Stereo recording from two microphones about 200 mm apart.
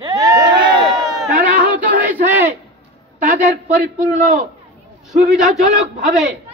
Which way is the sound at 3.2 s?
40° right (ahead or behind).